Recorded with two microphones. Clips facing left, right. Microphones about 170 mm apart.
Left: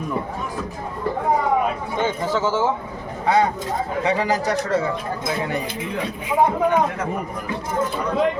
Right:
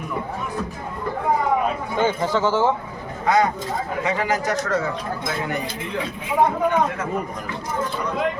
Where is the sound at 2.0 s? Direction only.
5° left (ahead or behind).